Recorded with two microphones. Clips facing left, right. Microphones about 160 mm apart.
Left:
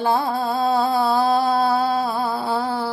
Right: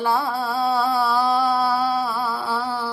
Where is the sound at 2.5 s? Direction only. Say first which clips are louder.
Left 3 dB; 50° left (ahead or behind).